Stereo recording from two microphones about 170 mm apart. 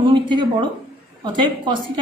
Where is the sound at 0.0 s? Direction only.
25° right (ahead or behind).